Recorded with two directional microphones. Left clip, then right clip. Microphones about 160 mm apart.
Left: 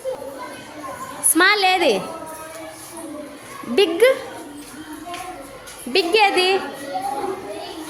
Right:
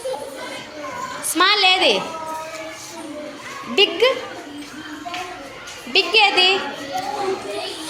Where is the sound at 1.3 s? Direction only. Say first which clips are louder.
Even; 40° left (ahead or behind).